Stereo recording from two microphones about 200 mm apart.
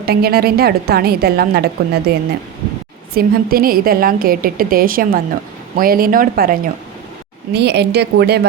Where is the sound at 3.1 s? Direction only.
50° right (ahead or behind).